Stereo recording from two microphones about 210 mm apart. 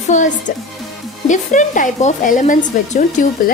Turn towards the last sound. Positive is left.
turn(degrees=35)  # may be behind; listen again after turning